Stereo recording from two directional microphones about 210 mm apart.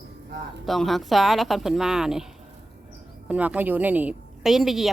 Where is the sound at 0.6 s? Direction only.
Centre (ahead or behind).